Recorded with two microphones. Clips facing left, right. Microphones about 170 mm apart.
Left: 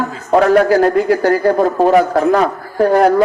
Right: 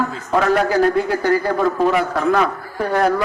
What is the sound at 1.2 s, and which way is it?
A man's voice, 45° left (ahead or behind).